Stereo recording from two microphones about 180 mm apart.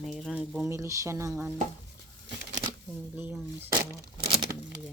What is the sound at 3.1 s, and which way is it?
Speech, 10° right (ahead or behind).